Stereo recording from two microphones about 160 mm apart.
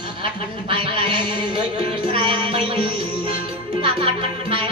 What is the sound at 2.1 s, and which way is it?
Music, 30° right (ahead or behind).